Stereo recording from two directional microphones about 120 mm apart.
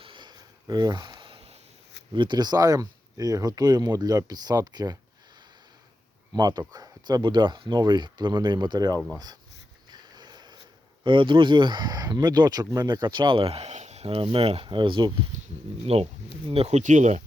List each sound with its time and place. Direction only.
0.0 s a sound: 40° right (ahead or behind)
2.1 s speech: 40° right (ahead or behind)
6.3 s speech: 35° right (ahead or behind)
9.9 s a sound: 35° right (ahead or behind)
11.0 s speech: 45° right (ahead or behind)
15.9 s speech: 55° right (ahead or behind); by 17.2 s 80° right